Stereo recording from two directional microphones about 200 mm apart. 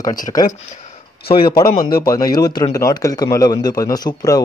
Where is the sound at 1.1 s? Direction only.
50° left (ahead or behind).